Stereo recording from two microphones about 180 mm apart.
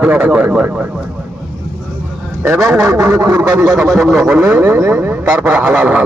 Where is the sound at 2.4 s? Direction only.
5° right (ahead or behind).